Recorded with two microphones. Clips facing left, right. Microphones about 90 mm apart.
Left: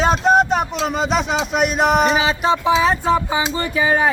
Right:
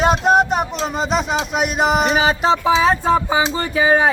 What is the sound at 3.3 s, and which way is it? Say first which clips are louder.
Music: right 2 dB; 30° right (ahead or behind).